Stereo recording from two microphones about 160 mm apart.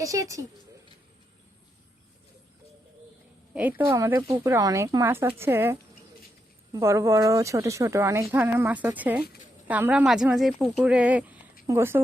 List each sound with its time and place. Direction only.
0.0 s speech: 20° right (ahead or behind)
3.5 s a woman's voice: 10° right (ahead or behind)